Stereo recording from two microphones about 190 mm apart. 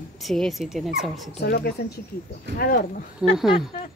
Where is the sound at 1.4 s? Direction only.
60° left (ahead or behind).